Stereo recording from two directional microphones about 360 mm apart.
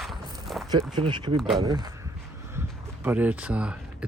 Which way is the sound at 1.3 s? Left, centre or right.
Centre.